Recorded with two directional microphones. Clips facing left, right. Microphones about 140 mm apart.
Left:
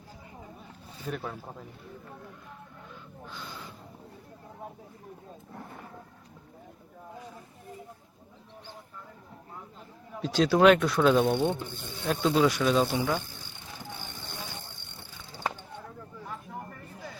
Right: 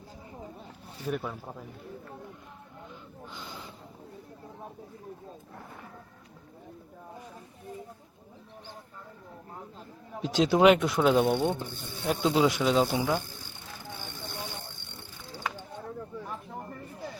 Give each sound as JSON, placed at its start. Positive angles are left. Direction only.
{"t": 1.0, "sound": "speech", "side_deg": -5}
{"t": 3.2, "sound": "gasp", "side_deg": -20}
{"t": 10.2, "sound": "speech", "side_deg": -15}